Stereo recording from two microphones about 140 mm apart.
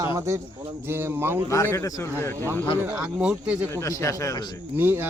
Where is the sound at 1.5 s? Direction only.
20° left (ahead or behind).